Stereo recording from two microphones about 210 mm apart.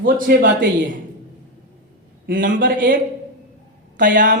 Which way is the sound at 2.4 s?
40° right (ahead or behind).